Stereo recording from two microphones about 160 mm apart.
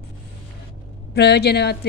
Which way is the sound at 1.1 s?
90° left.